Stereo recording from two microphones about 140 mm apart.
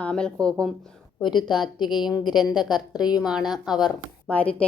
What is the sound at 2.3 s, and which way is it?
Speech, 30° left (ahead or behind).